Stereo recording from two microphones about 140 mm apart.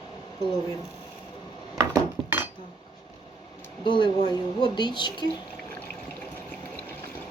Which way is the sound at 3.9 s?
35° left (ahead or behind).